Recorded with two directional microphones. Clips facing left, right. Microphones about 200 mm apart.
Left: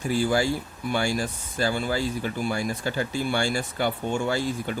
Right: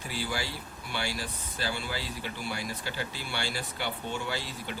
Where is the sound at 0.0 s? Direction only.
45° left (ahead or behind).